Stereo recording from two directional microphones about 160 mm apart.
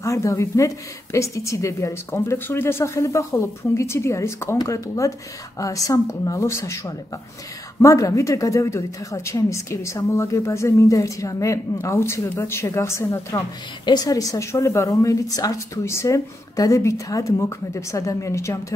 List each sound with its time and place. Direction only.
0.0 s a woman's voice: 20° left (ahead or behind)
7.8 s a woman's voice: 20° left (ahead or behind)